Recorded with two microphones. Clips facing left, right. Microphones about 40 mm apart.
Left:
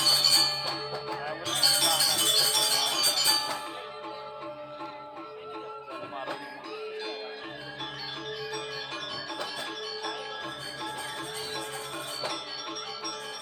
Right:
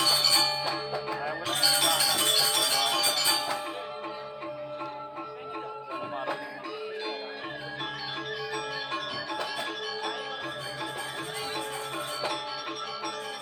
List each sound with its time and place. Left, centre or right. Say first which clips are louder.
0.0 s music: right 1 dB; right